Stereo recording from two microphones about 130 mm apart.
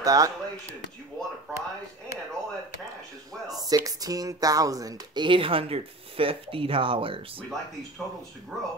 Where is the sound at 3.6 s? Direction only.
30° right (ahead or behind).